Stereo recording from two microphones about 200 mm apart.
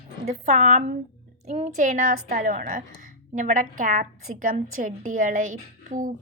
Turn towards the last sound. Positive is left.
turn(degrees=-40)  # may be behind; listen again after turning